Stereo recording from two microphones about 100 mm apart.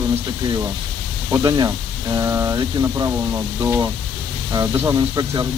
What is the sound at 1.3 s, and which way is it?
Speech, 40° right (ahead or behind).